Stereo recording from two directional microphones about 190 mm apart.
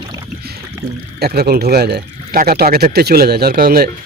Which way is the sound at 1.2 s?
55° right (ahead or behind).